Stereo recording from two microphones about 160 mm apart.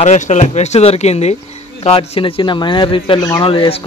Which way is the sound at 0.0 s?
45° left (ahead or behind).